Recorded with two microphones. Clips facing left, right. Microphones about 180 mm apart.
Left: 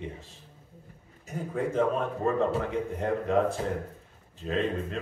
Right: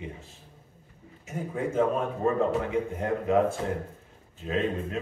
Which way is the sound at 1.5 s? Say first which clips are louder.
Right 1 dB; centre (ahead or behind).